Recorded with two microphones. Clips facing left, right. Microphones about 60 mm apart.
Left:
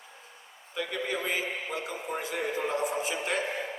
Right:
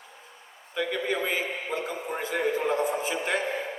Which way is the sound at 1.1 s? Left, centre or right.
Right.